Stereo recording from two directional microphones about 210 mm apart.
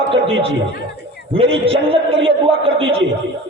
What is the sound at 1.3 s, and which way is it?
A man's voice, 25° right (ahead or behind).